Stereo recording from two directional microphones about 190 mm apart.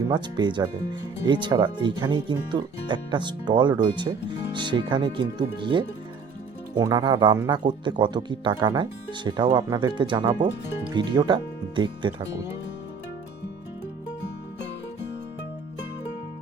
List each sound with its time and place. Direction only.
0.1 s speech: 25° right (ahead or behind)